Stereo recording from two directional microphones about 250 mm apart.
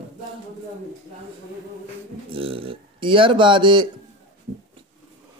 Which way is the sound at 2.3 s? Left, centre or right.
Right.